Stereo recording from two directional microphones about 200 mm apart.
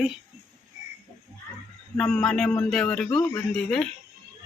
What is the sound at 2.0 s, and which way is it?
Speech, 5° left (ahead or behind).